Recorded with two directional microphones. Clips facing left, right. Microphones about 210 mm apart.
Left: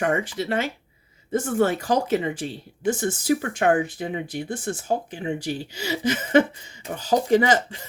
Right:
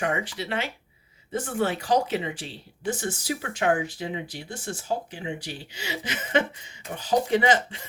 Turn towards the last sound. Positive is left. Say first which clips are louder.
# left 3 dB
turn(degrees=40)  # may be behind; listen again after turning